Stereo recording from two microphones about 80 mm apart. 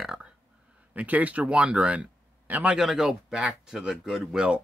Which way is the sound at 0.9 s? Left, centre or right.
Centre.